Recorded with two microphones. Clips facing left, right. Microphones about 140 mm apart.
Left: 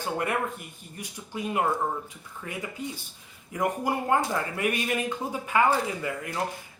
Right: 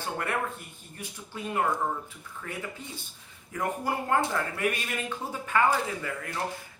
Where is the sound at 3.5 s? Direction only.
15° left (ahead or behind).